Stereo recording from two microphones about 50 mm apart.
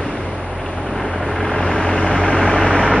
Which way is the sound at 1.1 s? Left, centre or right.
Centre.